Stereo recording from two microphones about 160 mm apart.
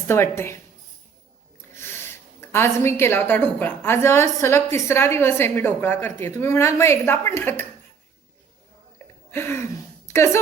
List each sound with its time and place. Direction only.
0.1 s a woman's voice: 15° left (ahead or behind)
1.7 s a woman's voice: 15° left (ahead or behind)
9.3 s a sound: 15° left (ahead or behind)
10.1 s speech: 15° left (ahead or behind)